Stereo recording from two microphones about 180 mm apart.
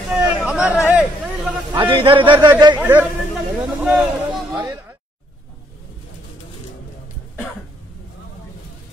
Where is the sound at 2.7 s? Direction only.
10° right (ahead or behind).